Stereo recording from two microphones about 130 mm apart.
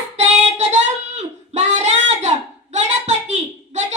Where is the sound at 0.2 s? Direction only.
60° right (ahead or behind).